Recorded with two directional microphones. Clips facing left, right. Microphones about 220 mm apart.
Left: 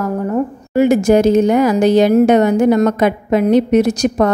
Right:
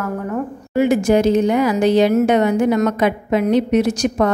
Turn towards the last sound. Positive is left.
turn(degrees=40)  # may be behind; listen again after turning